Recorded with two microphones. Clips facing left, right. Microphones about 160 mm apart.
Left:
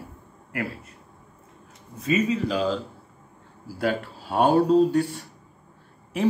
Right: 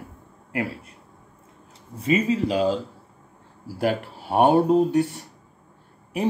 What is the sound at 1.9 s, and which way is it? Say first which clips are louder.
Speech: right 2 dB; 30° right (ahead or behind).